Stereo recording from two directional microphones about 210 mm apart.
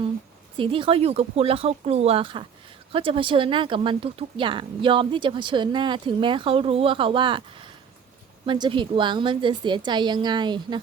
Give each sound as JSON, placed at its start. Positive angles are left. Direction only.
{"t": 0.5, "sound": "speech", "side_deg": -25}
{"t": 8.4, "sound": "speech", "side_deg": -20}